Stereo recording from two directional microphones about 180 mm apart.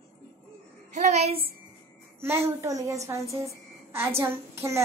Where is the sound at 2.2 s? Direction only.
15° right (ahead or behind).